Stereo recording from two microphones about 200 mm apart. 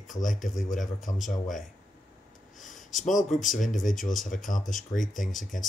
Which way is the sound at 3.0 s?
40° left (ahead or behind).